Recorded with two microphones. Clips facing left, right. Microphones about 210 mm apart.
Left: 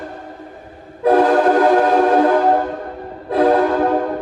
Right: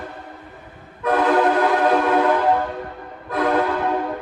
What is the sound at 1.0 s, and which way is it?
Train, 40° left (ahead or behind).